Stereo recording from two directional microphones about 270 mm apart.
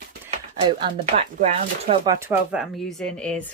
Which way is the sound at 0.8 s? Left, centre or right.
Right.